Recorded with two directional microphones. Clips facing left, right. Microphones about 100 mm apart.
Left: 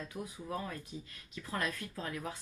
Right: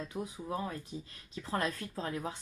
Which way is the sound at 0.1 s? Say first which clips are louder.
Right 3 dB; 25° right (ahead or behind).